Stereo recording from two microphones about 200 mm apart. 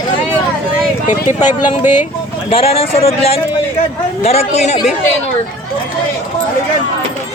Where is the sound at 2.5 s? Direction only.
30° left (ahead or behind).